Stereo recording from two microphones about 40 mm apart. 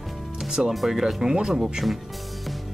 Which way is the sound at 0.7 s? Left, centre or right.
Centre.